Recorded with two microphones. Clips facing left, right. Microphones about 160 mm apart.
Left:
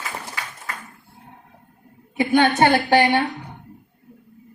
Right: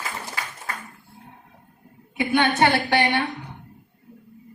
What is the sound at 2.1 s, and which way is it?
A woman's voice, 40° left (ahead or behind).